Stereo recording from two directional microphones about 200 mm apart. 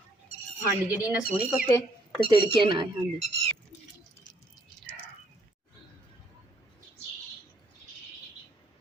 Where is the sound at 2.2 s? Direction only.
25° right (ahead or behind).